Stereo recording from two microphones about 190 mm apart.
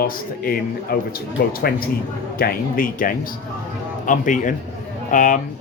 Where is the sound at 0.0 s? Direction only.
50° left (ahead or behind).